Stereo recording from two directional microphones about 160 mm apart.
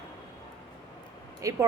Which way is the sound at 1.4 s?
20° right (ahead or behind).